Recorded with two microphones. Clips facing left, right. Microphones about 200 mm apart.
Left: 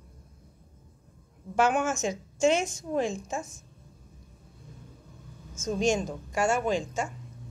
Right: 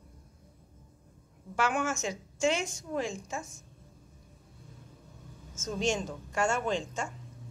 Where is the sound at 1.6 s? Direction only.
20° left (ahead or behind).